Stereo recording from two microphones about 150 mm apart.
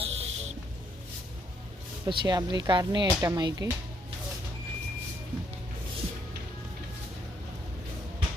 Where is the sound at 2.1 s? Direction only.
35° right (ahead or behind).